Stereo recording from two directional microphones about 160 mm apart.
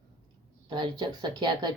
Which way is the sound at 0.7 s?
30° right (ahead or behind).